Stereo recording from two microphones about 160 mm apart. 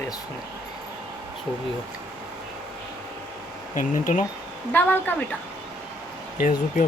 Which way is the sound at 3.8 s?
55° left (ahead or behind).